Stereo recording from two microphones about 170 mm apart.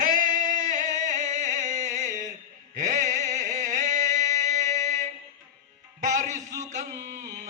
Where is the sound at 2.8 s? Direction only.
50° right (ahead or behind).